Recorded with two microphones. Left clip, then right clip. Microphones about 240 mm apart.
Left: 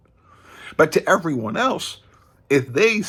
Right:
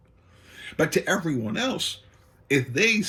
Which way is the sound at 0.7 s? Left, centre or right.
Centre.